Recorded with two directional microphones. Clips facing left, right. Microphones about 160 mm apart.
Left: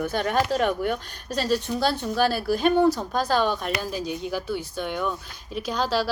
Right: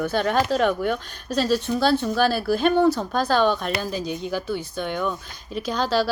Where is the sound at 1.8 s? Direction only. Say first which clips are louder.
Right 5 dB; 15° left (ahead or behind).